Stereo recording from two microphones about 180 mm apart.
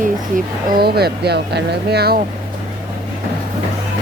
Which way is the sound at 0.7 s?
60° right (ahead or behind).